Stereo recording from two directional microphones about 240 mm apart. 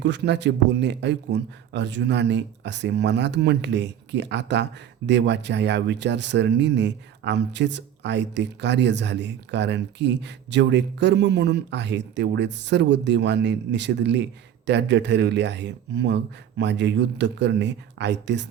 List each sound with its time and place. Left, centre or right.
0.0 s speech: right